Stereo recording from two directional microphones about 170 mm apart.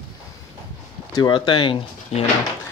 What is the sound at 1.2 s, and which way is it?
Speech, 30° left (ahead or behind).